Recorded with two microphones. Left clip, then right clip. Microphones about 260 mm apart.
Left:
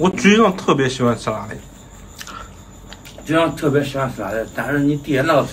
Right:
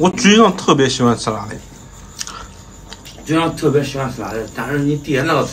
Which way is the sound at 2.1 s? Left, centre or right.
Centre.